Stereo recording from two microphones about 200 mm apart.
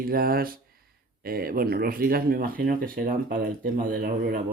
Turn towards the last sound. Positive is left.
turn(degrees=-45)  # may be behind; listen again after turning